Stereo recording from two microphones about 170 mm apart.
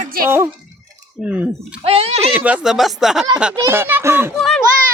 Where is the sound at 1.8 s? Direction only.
35° right (ahead or behind).